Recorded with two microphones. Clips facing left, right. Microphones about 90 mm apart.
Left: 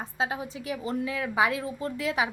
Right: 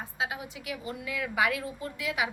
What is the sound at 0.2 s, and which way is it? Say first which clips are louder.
A woman's voice: left 4 dB; 35° left (ahead or behind).